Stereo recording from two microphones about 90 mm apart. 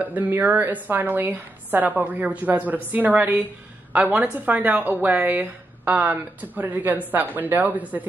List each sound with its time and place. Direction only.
0.0 s a woman's voice: 20° right (ahead or behind)